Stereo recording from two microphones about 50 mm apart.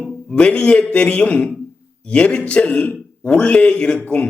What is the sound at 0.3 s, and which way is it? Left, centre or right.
A man's voice, centre.